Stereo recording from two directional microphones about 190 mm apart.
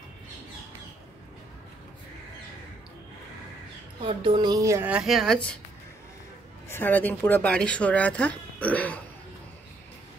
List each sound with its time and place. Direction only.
4.0 s a woman's voice: 25° right (ahead or behind); by 5.4 s centre (ahead or behind)
6.7 s speech: 10° left (ahead or behind)